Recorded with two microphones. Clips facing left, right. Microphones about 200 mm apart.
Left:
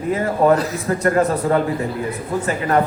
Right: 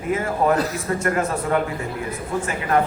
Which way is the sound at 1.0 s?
35° left (ahead or behind).